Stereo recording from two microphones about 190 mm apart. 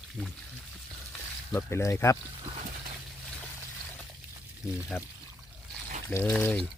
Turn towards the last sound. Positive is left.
turn(degrees=5)  # may be behind; listen again after turning